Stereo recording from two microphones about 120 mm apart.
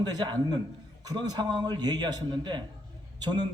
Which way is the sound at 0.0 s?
35° right (ahead or behind).